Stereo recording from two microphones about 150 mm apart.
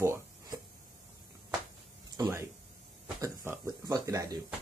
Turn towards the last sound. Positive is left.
turn(degrees=-20)  # may be behind; listen again after turning